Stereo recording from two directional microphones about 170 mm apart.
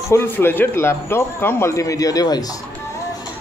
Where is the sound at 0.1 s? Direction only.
15° left (ahead or behind).